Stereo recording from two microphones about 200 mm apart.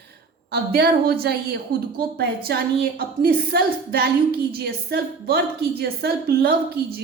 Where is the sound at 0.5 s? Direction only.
50° right (ahead or behind).